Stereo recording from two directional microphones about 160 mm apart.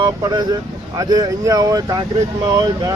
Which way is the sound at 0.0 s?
25° right (ahead or behind).